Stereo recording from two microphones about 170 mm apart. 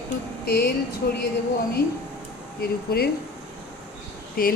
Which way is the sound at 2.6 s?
65° left (ahead or behind).